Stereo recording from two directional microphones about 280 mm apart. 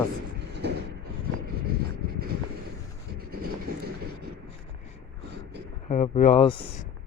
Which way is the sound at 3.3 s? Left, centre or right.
Right.